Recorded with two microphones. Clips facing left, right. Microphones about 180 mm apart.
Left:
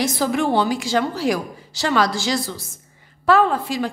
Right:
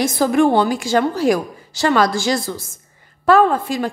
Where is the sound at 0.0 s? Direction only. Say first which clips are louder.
Right 5 dB; 50° right (ahead or behind).